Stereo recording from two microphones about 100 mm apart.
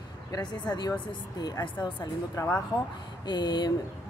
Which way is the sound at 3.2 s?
45° left (ahead or behind).